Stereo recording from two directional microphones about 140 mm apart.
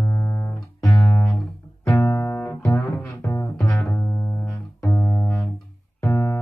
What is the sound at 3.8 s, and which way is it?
Music, 10° left (ahead or behind).